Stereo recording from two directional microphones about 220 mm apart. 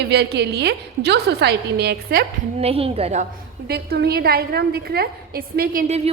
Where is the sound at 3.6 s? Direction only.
45° right (ahead or behind); by 6.1 s 30° right (ahead or behind).